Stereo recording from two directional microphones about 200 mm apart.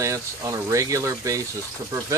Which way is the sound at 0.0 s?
15° right (ahead or behind).